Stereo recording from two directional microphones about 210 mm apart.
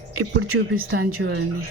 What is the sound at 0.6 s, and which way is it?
Speech, 55° right (ahead or behind).